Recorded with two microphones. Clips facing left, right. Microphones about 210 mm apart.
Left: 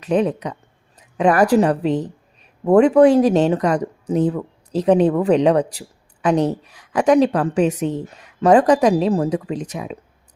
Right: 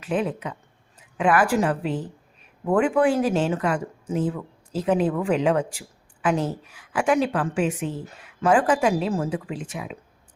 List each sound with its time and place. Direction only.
0.0 s a woman's voice: 40° left (ahead or behind)